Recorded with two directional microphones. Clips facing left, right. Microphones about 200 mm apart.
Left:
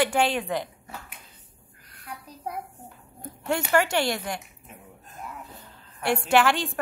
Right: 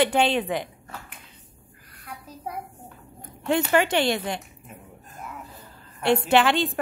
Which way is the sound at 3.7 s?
20° right (ahead or behind).